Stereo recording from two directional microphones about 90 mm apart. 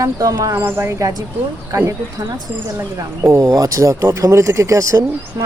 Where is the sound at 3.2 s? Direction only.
30° right (ahead or behind).